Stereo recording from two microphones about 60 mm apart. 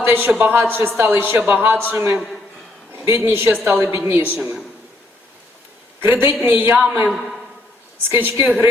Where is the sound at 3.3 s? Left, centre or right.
Right.